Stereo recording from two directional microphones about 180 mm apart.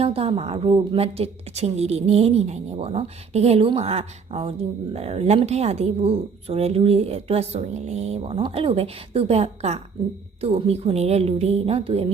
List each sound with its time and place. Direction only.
0.0 s speech: 30° right (ahead or behind)